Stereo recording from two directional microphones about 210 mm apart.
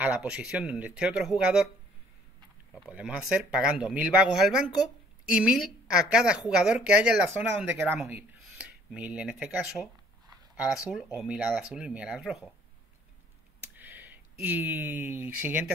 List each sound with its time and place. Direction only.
0.0 s a woman's voice: 5° right (ahead or behind)
2.7 s a woman's voice: 5° right (ahead or behind)
4.6 s a woman's voice: 20° left (ahead or behind)
5.2 s a woman's voice: 5° right (ahead or behind)
13.6 s speech: 10° right (ahead or behind)